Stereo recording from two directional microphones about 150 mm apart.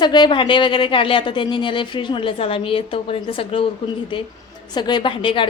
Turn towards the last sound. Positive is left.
turn(degrees=35)  # may be behind; listen again after turning